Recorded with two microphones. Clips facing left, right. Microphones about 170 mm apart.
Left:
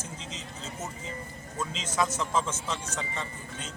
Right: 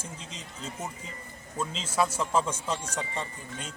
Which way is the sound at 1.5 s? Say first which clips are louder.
Right 2 dB; 10° right (ahead or behind).